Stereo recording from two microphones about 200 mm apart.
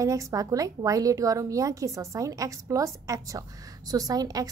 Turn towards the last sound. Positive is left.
turn(degrees=-20)  # may be behind; listen again after turning